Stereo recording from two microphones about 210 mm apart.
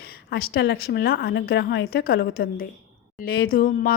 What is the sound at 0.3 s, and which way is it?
Speech, 45° left (ahead or behind).